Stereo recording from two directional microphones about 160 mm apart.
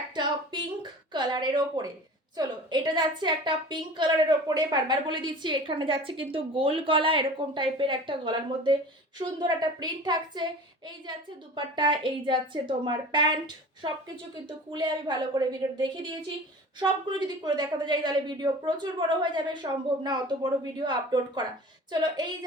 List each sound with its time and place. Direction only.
0.1 s a sound: 30° right (ahead or behind)
2.3 s a woman's voice: 25° right (ahead or behind)
11.5 s a woman's voice: 30° right (ahead or behind)
14.4 s a woman's voice: 30° right (ahead or behind)